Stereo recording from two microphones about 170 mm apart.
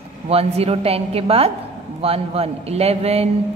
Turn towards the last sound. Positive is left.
turn(degrees=-35)  # may be behind; listen again after turning